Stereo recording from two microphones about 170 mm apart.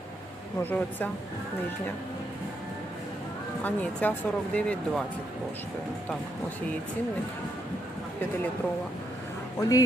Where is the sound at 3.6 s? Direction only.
10° left (ahead or behind).